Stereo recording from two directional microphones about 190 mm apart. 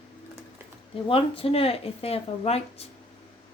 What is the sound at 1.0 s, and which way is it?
Speech, 30° left (ahead or behind).